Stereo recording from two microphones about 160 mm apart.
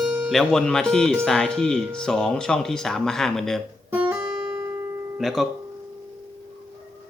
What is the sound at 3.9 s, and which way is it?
Music, 10° right (ahead or behind).